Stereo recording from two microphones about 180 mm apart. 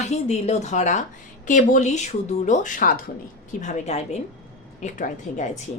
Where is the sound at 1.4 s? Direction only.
45° left (ahead or behind).